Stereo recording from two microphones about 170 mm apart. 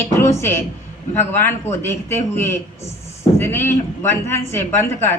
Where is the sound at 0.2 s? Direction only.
15° left (ahead or behind).